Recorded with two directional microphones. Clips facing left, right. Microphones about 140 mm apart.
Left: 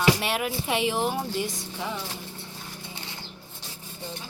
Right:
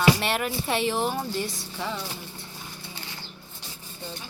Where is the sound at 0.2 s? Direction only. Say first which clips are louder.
Right 1 dB; 5° left (ahead or behind).